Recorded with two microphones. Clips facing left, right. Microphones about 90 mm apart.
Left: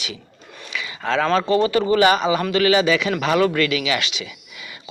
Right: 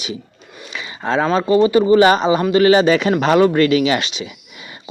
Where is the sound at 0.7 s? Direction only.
30° right (ahead or behind).